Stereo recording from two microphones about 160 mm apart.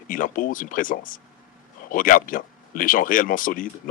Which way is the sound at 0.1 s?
60° left (ahead or behind).